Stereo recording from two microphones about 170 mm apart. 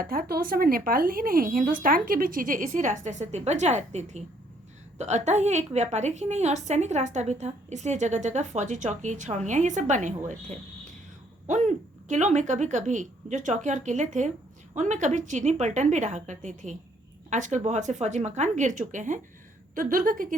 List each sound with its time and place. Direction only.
0.0 s a woman's voice: 60° right (ahead or behind)
11.4 s a woman's voice: 45° right (ahead or behind)